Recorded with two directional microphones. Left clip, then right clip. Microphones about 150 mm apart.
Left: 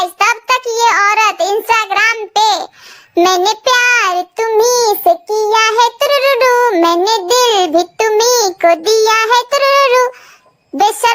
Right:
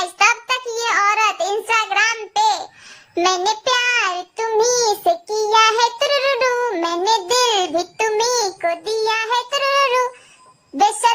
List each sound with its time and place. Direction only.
0.0 s child singing: 30° left (ahead or behind)
10.8 s a child's voice: 40° left (ahead or behind)